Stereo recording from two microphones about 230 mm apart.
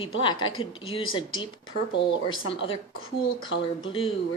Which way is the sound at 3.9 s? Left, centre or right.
Left.